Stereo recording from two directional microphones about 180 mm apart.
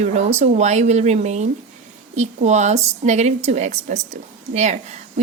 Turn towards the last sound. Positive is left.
turn(degrees=-40)  # may be behind; listen again after turning